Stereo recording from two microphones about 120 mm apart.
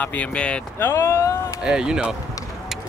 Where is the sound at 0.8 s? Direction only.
20° left (ahead or behind).